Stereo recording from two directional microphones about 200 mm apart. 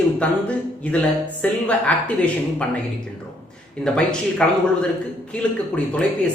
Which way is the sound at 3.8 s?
5° left (ahead or behind).